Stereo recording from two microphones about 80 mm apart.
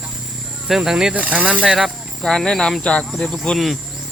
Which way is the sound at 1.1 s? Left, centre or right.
Centre.